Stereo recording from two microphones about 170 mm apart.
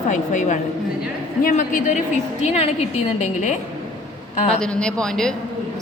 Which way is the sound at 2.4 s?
40° left (ahead or behind).